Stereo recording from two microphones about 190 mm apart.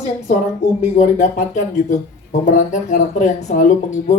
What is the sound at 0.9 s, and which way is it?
Speech, 40° left (ahead or behind).